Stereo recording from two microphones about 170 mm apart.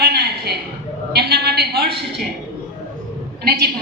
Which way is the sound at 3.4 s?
65° right (ahead or behind).